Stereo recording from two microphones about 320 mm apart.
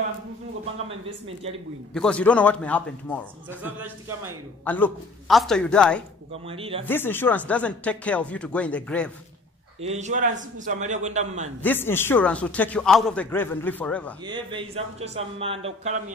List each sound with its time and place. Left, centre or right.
2.0 s a man's voice: centre
3.4 s speech: centre
4.6 s a man's voice: centre
6.4 s speech: centre
6.9 s a man's voice: centre
9.8 s a man's voice: right
11.6 s a man's voice: centre
14.2 s speech: centre